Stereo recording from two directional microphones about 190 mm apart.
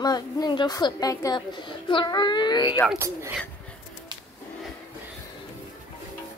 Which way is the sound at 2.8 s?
15° right (ahead or behind).